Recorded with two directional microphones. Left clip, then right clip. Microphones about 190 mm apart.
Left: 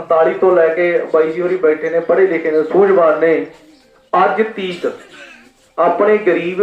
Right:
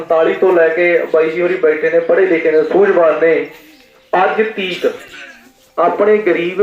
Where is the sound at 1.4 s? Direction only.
30° right (ahead or behind).